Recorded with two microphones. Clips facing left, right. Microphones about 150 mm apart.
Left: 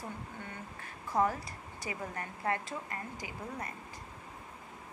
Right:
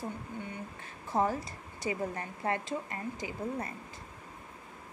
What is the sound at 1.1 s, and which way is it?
A woman's voice, 25° right (ahead or behind).